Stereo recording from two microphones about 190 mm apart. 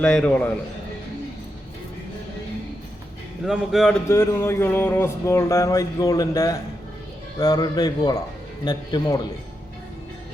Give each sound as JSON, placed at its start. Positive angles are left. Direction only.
{"t": 0.0, "sound": "speech", "side_deg": 5}
{"t": 3.4, "sound": "speech", "side_deg": 0}
{"t": 4.1, "sound": "a sound", "side_deg": 15}
{"t": 7.3, "sound": "speech", "side_deg": 20}